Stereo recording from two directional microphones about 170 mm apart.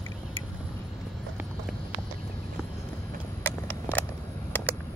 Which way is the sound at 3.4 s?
10° left (ahead or behind).